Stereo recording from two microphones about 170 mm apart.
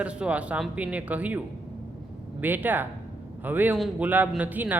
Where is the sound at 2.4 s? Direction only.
10° right (ahead or behind).